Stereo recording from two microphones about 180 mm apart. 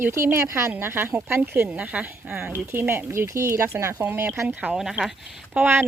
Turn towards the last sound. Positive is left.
turn(degrees=-10)  # may be behind; listen again after turning